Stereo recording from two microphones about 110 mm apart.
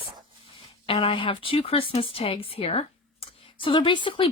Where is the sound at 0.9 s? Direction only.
55° left (ahead or behind).